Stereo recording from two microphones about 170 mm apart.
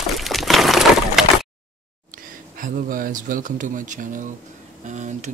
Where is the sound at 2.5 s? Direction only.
55° right (ahead or behind).